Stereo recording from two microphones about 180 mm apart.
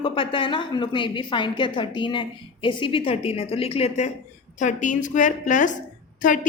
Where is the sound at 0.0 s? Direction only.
30° left (ahead or behind).